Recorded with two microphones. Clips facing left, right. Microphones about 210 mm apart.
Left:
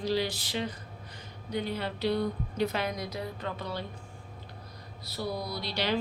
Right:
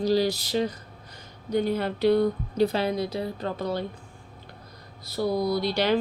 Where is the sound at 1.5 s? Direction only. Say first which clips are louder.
Right 8 dB; 45° right (ahead or behind).